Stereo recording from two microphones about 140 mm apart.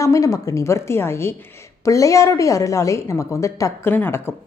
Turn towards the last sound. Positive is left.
turn(degrees=15)  # may be behind; listen again after turning